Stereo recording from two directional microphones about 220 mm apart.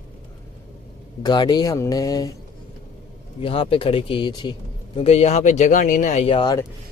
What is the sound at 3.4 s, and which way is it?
Speech, 25° left (ahead or behind).